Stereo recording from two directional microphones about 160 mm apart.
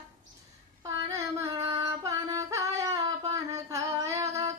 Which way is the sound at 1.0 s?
20° right (ahead or behind).